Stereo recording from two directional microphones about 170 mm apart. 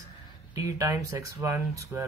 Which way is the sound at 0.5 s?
20° right (ahead or behind).